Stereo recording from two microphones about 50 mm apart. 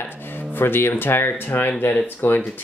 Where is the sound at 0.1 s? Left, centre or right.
Left.